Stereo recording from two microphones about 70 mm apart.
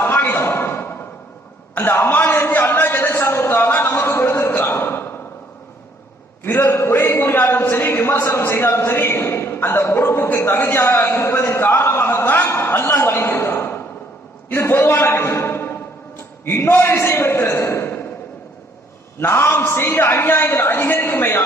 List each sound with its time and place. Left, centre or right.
0.0 s a sound: left
6.4 s a man's voice: left
19.2 s a man's voice: left